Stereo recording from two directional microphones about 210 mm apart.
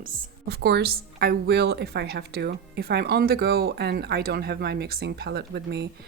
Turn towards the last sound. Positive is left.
turn(degrees=-50)  # may be behind; listen again after turning